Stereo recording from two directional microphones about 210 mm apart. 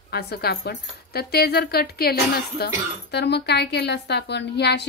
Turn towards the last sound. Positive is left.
turn(degrees=55)  # may be behind; listen again after turning